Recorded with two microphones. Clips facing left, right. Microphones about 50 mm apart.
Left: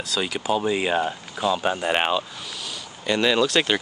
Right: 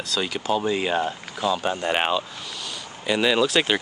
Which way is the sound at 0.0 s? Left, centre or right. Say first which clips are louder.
Even; centre.